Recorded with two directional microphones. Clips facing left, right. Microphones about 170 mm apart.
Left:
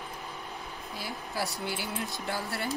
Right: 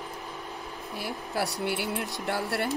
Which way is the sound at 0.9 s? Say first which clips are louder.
Right 4 dB; 65° right (ahead or behind).